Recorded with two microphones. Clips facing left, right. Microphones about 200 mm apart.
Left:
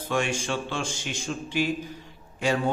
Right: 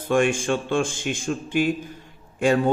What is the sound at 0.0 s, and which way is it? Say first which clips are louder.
A man's voice: right 7 dB; 50° right (ahead or behind).